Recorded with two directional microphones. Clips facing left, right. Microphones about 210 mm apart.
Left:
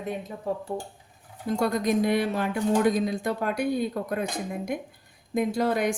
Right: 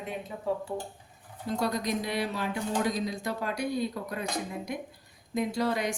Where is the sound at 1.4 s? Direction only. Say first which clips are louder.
Left 5 dB; 50° left (ahead or behind).